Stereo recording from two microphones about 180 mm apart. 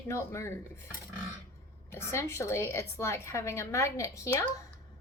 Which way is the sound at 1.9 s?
15° left (ahead or behind).